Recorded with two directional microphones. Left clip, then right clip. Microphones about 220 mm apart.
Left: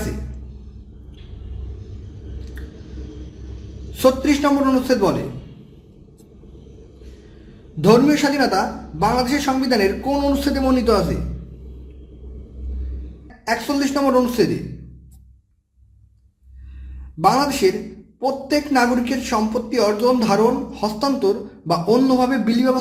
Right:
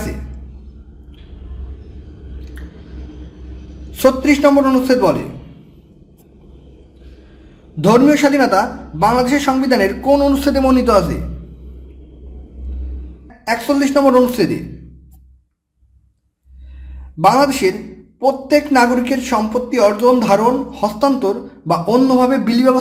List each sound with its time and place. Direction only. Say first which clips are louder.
4.0 s speech: right 5 dB; 10° right (ahead or behind)
7.9 s speech: right 4 dB; 15° right (ahead or behind)
13.4 s speech: right 5 dB; 15° right (ahead or behind)
17.2 s speech: right 4 dB; 15° right (ahead or behind)